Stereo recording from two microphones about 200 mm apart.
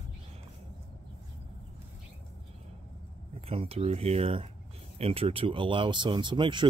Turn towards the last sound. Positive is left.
turn(degrees=-25)  # may be behind; listen again after turning